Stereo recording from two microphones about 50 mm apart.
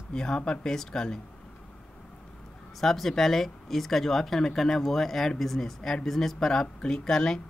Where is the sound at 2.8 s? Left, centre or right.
Centre.